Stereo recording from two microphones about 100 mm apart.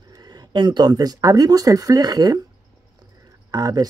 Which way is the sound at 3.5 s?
40° right (ahead or behind).